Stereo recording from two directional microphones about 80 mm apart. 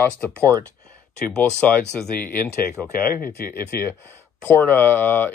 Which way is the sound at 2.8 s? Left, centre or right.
Centre.